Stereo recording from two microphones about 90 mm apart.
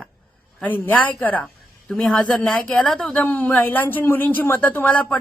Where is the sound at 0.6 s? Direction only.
20° left (ahead or behind).